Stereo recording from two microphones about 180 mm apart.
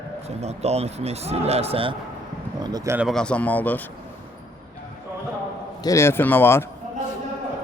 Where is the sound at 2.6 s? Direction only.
20° right (ahead or behind).